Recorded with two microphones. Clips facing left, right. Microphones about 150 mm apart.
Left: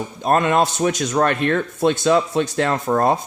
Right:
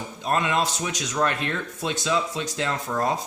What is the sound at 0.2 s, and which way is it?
Speech, 55° left (ahead or behind).